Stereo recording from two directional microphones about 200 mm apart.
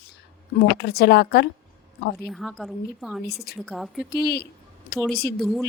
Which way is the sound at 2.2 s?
Centre (ahead or behind).